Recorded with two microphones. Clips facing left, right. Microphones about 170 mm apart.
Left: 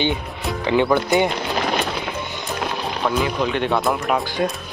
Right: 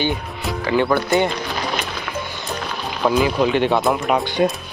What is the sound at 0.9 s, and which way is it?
Speech, 15° left (ahead or behind).